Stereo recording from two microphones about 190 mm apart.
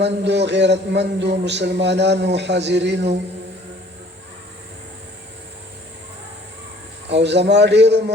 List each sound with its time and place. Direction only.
0.0 s a man's voice: 65° right (ahead or behind)
7.1 s a man's voice: 65° right (ahead or behind)